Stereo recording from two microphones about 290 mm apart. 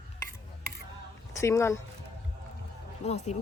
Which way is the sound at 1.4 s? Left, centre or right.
Centre.